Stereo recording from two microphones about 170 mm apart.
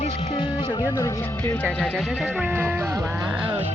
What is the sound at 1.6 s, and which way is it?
Speech, 5° left (ahead or behind).